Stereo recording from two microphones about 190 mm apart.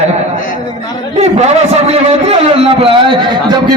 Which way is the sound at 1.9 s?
30° right (ahead or behind).